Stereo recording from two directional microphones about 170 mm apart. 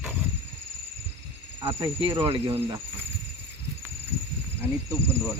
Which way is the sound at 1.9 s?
30° right (ahead or behind).